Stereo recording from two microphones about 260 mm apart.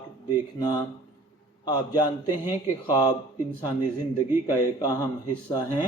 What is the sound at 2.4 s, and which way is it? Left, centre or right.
Speech, centre.